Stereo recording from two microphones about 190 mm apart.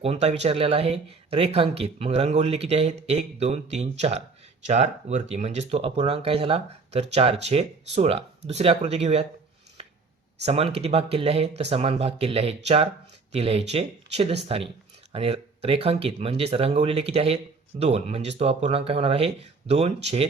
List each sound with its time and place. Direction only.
0.0 s speech: 35° right (ahead or behind)
10.4 s speech: 30° right (ahead or behind)